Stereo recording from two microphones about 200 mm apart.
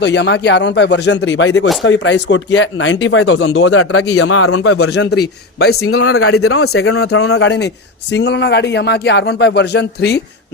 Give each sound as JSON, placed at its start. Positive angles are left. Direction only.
{"t": 0.0, "sound": "a man's voice", "side_deg": 60}
{"t": 6.1, "sound": "speech", "side_deg": 90}